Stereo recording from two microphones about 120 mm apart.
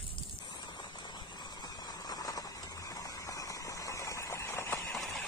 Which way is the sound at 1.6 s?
35° left (ahead or behind).